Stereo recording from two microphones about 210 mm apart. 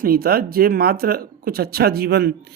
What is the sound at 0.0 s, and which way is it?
Speech, 45° right (ahead or behind).